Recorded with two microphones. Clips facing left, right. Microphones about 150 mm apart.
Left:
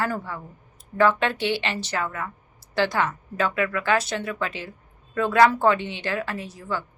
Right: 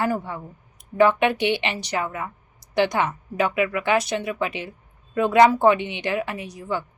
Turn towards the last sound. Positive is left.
turn(degrees=-15)  # may be behind; listen again after turning